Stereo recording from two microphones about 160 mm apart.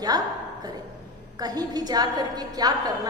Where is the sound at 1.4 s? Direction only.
25° right (ahead or behind).